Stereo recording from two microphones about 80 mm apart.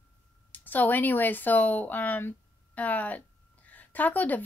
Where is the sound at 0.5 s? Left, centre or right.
Left.